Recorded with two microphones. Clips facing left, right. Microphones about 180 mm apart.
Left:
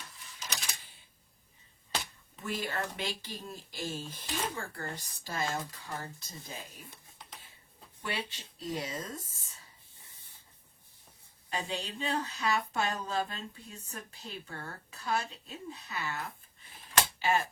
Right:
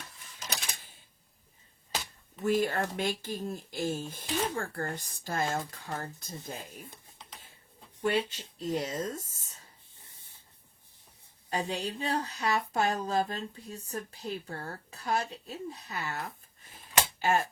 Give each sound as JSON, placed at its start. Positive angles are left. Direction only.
{"t": 0.3, "sound": "typewriter", "side_deg": -55}
{"t": 2.4, "sound": "speech", "side_deg": -45}
{"t": 8.0, "sound": "speech", "side_deg": -45}
{"t": 11.4, "sound": "speech", "side_deg": -35}
{"t": 17.2, "sound": "typewriter", "side_deg": -45}